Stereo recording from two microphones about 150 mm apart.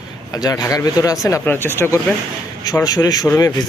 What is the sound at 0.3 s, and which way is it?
Speech, 25° left (ahead or behind).